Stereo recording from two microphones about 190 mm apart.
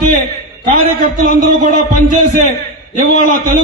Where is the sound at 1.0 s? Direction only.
45° right (ahead or behind).